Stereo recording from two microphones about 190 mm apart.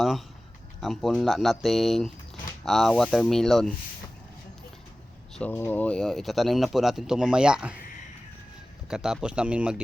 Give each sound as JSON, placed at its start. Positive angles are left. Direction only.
{"t": 0.8, "sound": "speech", "side_deg": 0}
{"t": 5.3, "sound": "speech", "side_deg": 10}
{"t": 8.9, "sound": "speech", "side_deg": -5}